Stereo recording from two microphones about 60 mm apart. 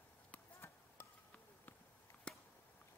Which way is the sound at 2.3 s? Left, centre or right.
Centre.